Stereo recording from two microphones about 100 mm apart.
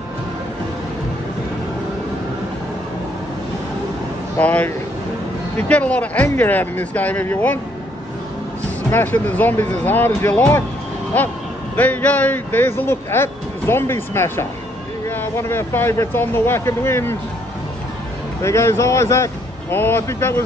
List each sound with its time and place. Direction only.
4.4 s speech: 15° left (ahead or behind)
8.9 s speech: 20° left (ahead or behind)
11.7 s speech: 15° left (ahead or behind)
18.4 s speech: 30° left (ahead or behind)